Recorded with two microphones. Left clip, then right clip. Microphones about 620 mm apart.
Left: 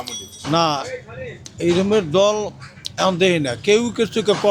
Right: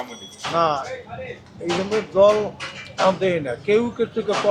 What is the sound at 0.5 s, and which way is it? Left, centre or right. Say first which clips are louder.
Speech: left 2 dB; left.